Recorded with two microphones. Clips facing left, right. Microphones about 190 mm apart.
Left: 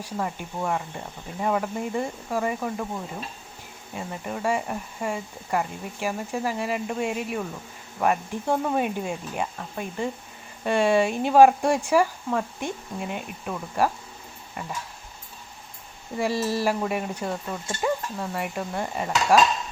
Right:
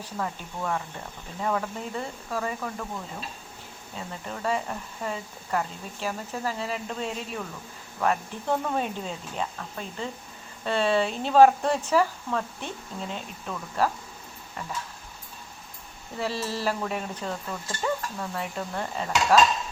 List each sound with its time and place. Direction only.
0.0 s speech: 15° left (ahead or behind)
16.1 s speech: 10° left (ahead or behind)